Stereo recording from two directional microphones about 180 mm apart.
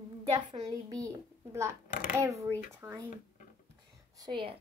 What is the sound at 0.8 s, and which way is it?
A child's voice, 20° right (ahead or behind).